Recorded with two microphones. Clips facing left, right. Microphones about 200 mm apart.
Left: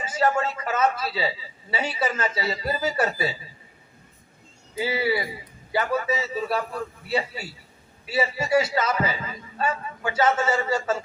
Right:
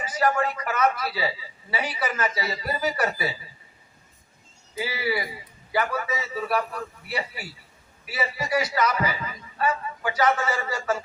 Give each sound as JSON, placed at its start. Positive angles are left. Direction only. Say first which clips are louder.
{"t": 0.0, "sound": "a man's voice", "louder": "left 1 dB", "side_deg": 25}
{"t": 4.8, "sound": "a man's voice", "louder": "left 3 dB", "side_deg": 25}